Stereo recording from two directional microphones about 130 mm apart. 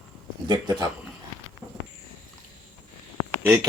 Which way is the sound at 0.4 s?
35° right (ahead or behind).